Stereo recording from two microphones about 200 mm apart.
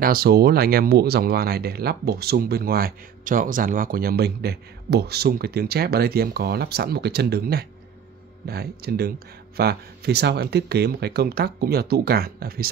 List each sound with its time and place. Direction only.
0.0 s speech: 50° right (ahead or behind)